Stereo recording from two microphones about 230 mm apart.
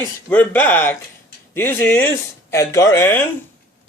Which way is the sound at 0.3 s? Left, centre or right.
Centre.